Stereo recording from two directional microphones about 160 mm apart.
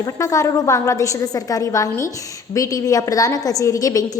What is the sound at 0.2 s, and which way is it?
A woman's voice, 20° left (ahead or behind).